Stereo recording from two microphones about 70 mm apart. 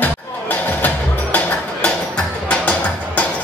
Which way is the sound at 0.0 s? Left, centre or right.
Left.